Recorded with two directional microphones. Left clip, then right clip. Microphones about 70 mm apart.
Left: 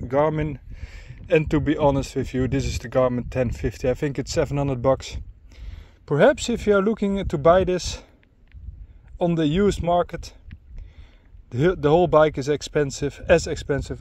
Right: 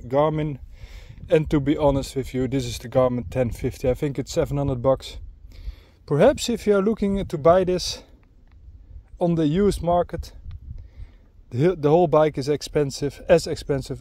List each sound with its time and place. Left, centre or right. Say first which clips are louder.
0.1 s speech: even; centre
4.7 s speech: even; centre
5.7 s speech: even; right
9.2 s speech: even; centre
11.4 s speech: even; centre; by 13.9 s right